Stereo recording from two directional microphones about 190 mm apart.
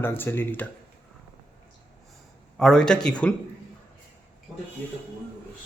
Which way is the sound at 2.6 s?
5° left (ahead or behind).